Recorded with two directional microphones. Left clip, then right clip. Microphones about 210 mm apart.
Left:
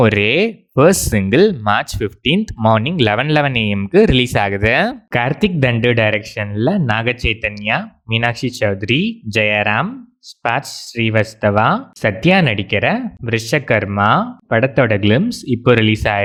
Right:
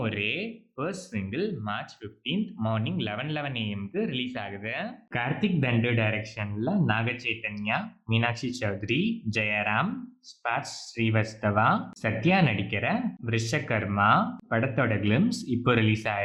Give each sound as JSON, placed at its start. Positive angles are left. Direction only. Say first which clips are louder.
{"t": 0.0, "sound": "speech", "louder": "left 17 dB", "side_deg": 50}